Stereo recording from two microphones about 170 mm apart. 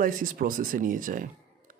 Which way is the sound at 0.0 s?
55° right (ahead or behind).